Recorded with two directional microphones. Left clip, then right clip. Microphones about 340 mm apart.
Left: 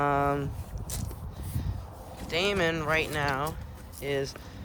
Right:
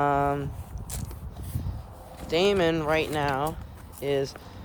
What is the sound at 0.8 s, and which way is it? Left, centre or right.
Mechanisms, centre.